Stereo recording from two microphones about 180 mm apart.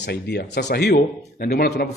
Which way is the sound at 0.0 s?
65° left (ahead or behind).